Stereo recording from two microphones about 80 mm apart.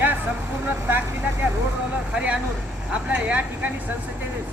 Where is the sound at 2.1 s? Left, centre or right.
Centre.